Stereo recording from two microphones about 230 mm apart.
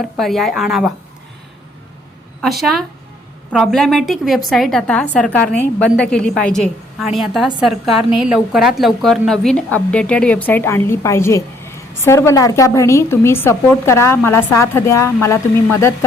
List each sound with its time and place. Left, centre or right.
0.0 s a woman's voice: centre
2.4 s a woman's voice: centre